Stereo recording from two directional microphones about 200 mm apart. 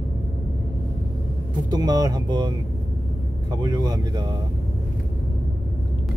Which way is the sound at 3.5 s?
20° right (ahead or behind).